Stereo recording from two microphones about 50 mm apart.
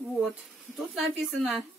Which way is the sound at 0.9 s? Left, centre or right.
Centre.